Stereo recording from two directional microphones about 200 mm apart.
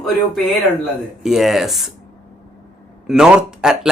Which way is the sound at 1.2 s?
Centre (ahead or behind).